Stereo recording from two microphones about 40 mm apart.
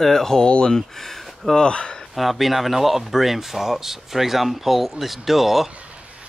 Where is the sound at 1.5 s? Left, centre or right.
Left.